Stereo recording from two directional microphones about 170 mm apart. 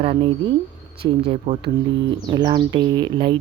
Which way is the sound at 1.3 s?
30° right (ahead or behind).